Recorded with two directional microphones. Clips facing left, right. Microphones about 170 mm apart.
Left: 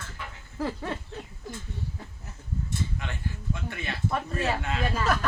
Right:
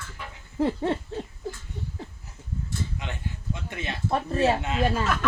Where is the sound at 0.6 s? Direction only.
25° right (ahead or behind).